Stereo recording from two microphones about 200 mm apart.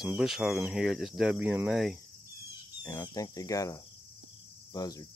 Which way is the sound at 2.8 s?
20° left (ahead or behind).